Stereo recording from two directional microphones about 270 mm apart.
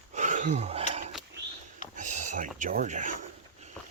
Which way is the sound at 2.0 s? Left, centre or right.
Right.